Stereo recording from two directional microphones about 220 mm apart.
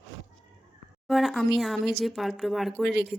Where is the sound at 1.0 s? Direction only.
Centre (ahead or behind).